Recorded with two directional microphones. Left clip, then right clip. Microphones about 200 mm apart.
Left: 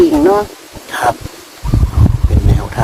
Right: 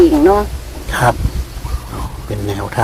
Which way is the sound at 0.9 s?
40° right (ahead or behind).